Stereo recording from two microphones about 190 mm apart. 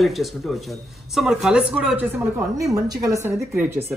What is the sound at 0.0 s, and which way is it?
Speech, centre (ahead or behind).